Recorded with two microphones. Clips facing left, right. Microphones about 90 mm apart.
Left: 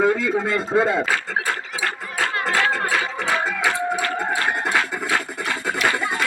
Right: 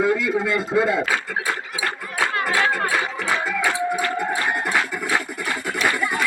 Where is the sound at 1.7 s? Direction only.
20° right (ahead or behind).